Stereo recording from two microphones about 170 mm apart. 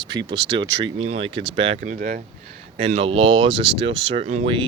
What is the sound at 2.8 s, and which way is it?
Speech, 35° right (ahead or behind).